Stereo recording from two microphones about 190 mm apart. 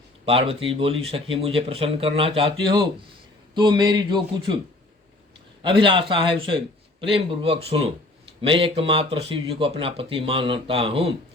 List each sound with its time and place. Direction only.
0.3 s speech: 30° right (ahead or behind)
5.6 s speech: 25° right (ahead or behind)